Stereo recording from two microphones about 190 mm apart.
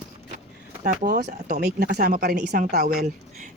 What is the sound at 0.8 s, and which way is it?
Speech, 45° right (ahead or behind).